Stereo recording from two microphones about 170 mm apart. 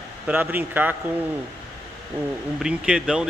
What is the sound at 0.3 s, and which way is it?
Speech, 10° right (ahead or behind).